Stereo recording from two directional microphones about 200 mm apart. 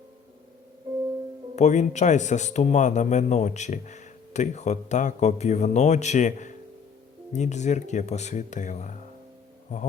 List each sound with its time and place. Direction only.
1.5 s speech: 35° left (ahead or behind)